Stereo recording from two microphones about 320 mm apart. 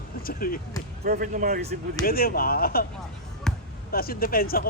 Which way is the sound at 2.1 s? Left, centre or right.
Left.